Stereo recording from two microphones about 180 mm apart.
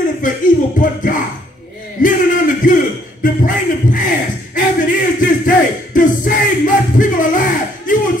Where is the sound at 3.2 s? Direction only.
50° left (ahead or behind).